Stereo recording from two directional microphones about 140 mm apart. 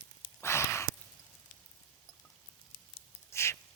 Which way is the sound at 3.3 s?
20° left (ahead or behind).